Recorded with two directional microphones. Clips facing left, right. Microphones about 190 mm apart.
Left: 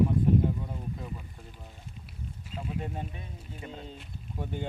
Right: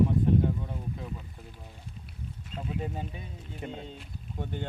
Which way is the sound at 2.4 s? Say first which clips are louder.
Right 1 dB; 5° left (ahead or behind).